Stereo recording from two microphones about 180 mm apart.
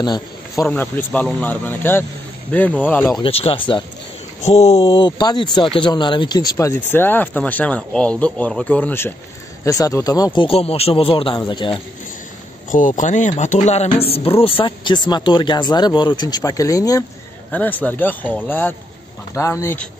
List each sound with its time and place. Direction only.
0.0 s speech: 25° left (ahead or behind)
0.7 s speech: 10° left (ahead or behind)
3.2 s speech: 30° left (ahead or behind)
12.7 s speech: 45° left (ahead or behind); by 19.9 s 10° left (ahead or behind)